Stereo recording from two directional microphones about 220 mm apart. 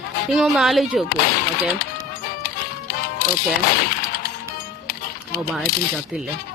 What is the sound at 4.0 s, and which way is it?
Music, 45° left (ahead or behind).